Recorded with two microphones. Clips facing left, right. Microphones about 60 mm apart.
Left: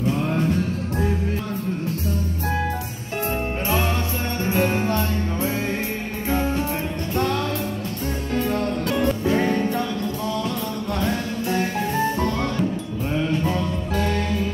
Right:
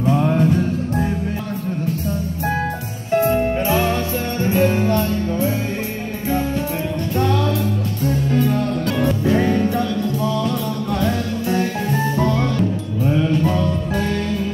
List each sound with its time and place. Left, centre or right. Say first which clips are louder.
4.6 s music: right 4 dB; left
8.4 s music: even; centre
9.0 s music: right 3 dB; centre
9.4 s music: right 3 dB; centre
13.0 s music: right 5 dB; centre